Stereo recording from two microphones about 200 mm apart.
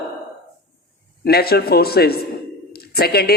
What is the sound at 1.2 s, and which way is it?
A man's voice, 50° left (ahead or behind).